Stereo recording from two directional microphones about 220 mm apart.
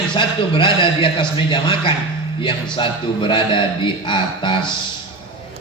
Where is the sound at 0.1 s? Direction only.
20° left (ahead or behind).